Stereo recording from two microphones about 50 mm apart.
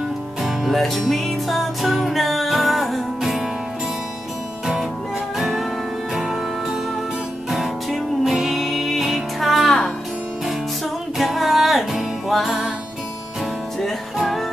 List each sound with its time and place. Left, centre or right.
0.4 s music: centre
5.4 s music: centre
11.1 s music: centre
14.1 s music: centre